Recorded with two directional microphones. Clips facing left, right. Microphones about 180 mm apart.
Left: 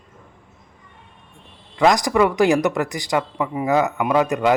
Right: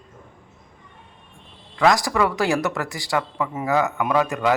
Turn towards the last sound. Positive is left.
turn(degrees=20)  # may be behind; listen again after turning